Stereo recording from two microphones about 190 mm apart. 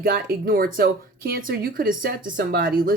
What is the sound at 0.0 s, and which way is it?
Speech, 55° right (ahead or behind).